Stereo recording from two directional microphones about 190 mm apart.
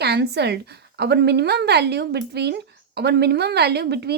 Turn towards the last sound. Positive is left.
turn(degrees=-60)  # may be behind; listen again after turning